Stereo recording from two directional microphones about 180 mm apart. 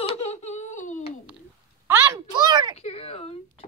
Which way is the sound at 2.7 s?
35° left (ahead or behind).